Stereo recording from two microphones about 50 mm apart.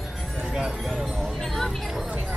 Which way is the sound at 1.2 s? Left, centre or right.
Centre.